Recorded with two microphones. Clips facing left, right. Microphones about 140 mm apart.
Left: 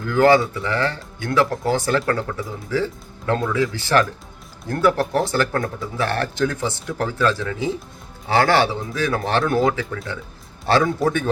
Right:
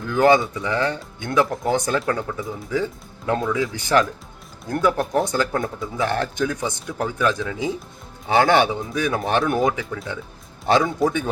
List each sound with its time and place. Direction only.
0.0 s speech: 20° right (ahead or behind)